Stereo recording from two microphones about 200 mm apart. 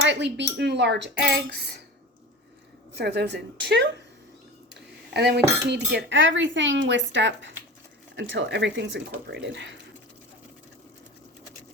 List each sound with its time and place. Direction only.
0.0 s speech: 65° right (ahead or behind)
2.9 s speech: 55° right (ahead or behind)